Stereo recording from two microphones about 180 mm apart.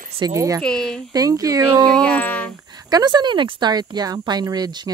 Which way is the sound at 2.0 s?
10° left (ahead or behind).